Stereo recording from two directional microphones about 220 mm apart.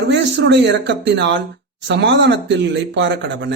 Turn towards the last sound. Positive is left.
turn(degrees=-55)  # may be behind; listen again after turning